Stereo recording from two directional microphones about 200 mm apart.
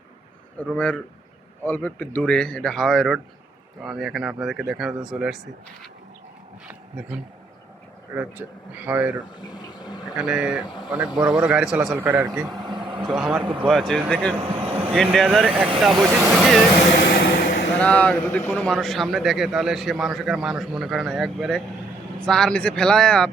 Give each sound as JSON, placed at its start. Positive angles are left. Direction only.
{"t": 0.6, "sound": "a man's voice", "side_deg": 5}
{"t": 8.1, "sound": "speech", "side_deg": -10}
{"t": 9.4, "sound": "a sound", "side_deg": 20}
{"t": 10.2, "sound": "a man's voice", "side_deg": -5}
{"t": 12.6, "sound": "vehicle", "side_deg": -20}
{"t": 13.1, "sound": "a man's voice", "side_deg": 0}
{"t": 15.9, "sound": "speech", "side_deg": -20}
{"t": 16.4, "sound": "speech", "side_deg": 0}
{"t": 17.2, "sound": "vehicle", "side_deg": 50}
{"t": 17.7, "sound": "a man's voice", "side_deg": 5}